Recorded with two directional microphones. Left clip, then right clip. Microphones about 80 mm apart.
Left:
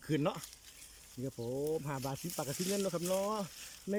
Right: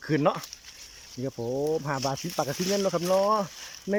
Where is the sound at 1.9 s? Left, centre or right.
Left.